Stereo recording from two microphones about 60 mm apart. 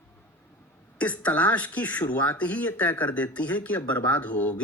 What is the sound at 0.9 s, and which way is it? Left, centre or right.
Speech, left.